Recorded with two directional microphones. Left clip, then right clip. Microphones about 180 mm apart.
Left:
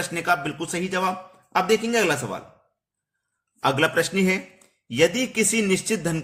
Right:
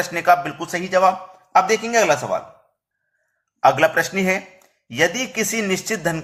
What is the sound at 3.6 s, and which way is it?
A man's voice, 20° left (ahead or behind).